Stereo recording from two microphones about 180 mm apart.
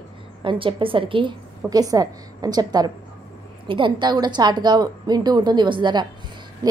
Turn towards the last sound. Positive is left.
turn(degrees=-20)  # may be behind; listen again after turning